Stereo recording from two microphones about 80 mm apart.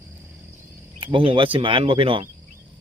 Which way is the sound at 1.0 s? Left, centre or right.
Right.